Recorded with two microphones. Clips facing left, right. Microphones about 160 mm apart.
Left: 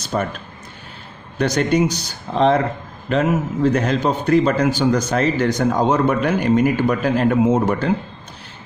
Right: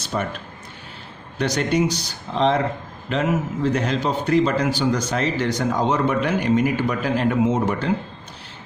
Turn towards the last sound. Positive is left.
turn(degrees=45)  # may be behind; listen again after turning